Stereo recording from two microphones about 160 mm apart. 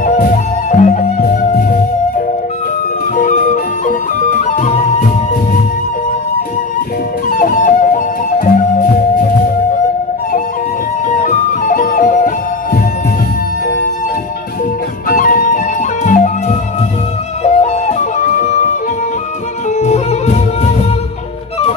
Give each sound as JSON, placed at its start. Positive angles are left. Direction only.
{"t": 0.0, "sound": "music", "side_deg": 50}
{"t": 7.2, "sound": "music", "side_deg": 60}
{"t": 11.2, "sound": "music", "side_deg": 50}
{"t": 15.0, "sound": "music", "side_deg": 60}
{"t": 19.8, "sound": "music", "side_deg": 45}